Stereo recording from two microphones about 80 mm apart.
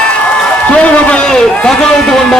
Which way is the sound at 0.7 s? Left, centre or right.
Centre.